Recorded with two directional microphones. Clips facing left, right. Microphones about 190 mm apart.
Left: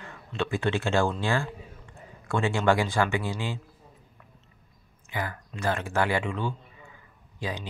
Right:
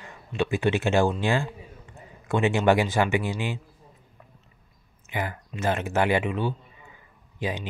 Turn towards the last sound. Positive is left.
turn(degrees=-20)  # may be behind; listen again after turning